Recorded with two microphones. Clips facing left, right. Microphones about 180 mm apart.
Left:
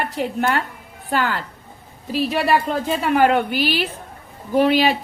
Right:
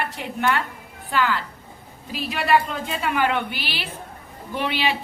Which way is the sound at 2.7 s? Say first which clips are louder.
Left 6 dB; 45° left (ahead or behind).